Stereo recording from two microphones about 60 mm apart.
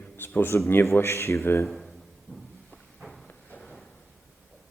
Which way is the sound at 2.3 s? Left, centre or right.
Right.